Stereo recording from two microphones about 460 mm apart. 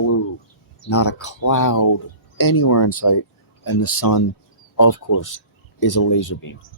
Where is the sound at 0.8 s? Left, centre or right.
Left.